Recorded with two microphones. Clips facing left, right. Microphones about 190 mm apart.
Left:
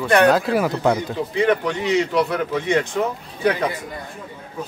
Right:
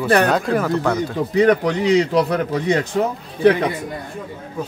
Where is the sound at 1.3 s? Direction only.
40° right (ahead or behind).